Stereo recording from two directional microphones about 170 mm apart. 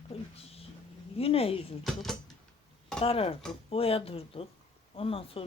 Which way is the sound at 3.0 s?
35° left (ahead or behind).